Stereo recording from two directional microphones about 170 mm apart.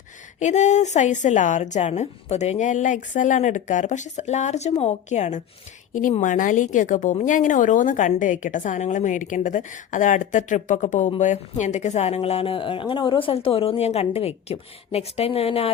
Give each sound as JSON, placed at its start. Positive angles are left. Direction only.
{"t": 0.3, "sound": "a woman's voice", "side_deg": 45}